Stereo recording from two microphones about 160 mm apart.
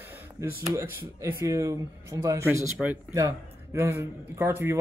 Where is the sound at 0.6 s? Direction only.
20° right (ahead or behind).